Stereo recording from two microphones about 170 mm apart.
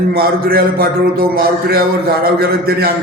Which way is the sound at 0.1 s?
65° right (ahead or behind).